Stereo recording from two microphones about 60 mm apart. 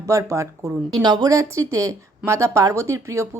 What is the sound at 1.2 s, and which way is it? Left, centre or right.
Speech, right.